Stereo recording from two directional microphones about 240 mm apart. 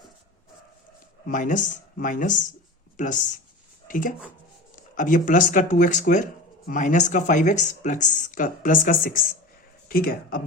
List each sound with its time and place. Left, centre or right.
1.3 s speech: left
3.8 s speech: left